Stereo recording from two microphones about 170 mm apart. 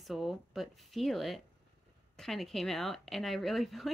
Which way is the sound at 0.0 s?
Centre (ahead or behind).